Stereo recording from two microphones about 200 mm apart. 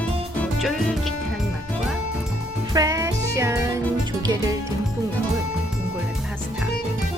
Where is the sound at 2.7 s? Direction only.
15° right (ahead or behind).